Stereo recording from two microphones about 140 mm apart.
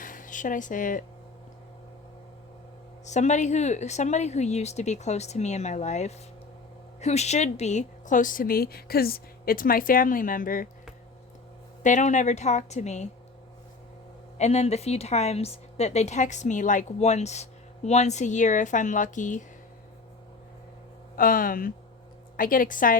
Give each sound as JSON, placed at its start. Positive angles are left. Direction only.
{"t": 0.0, "sound": "speech", "side_deg": 70}
{"t": 3.1, "sound": "a woman's voice", "side_deg": 55}
{"t": 11.8, "sound": "a woman's voice", "side_deg": 60}
{"t": 14.3, "sound": "speech", "side_deg": 50}
{"t": 21.2, "sound": "a woman's voice", "side_deg": 85}